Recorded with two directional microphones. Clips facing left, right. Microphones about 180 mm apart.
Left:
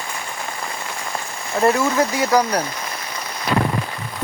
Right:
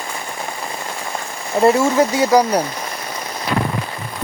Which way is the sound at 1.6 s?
15° right (ahead or behind).